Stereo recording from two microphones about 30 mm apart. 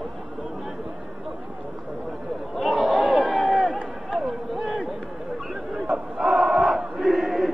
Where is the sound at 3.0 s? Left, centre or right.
Right.